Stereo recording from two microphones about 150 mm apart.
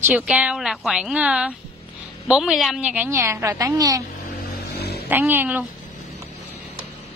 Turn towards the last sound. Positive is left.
turn(degrees=-10)  # may be behind; listen again after turning